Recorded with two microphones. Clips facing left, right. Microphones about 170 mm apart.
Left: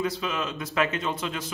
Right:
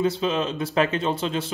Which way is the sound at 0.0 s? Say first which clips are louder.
Right 6 dB; 30° right (ahead or behind).